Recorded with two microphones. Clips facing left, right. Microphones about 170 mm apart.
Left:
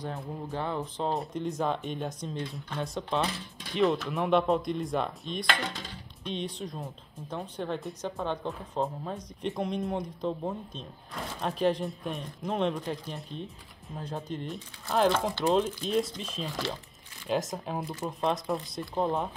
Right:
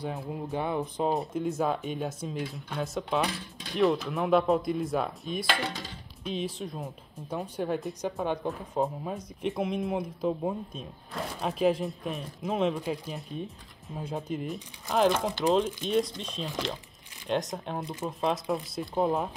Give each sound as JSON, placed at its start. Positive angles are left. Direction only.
{"t": 0.0, "sound": "speech", "side_deg": -5}